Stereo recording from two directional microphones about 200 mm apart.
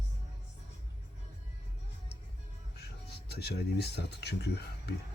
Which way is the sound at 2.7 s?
55° left (ahead or behind).